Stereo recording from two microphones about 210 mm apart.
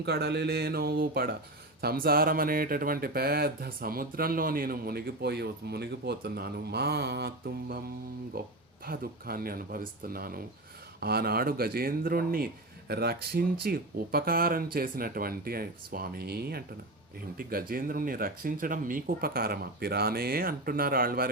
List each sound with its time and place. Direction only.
0.0 s speech: 50° right (ahead or behind)